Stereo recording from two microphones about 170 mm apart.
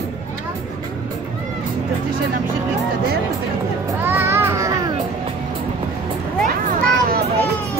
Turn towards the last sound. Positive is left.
turn(degrees=-50)  # may be behind; listen again after turning